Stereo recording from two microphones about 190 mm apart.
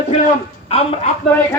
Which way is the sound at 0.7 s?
30° left (ahead or behind).